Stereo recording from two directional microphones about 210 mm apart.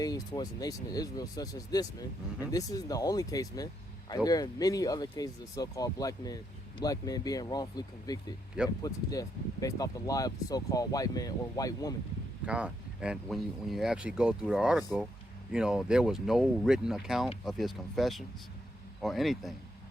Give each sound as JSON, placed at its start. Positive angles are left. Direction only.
{"t": 0.0, "sound": "speech", "side_deg": 15}
{"t": 12.5, "sound": "speech", "side_deg": -5}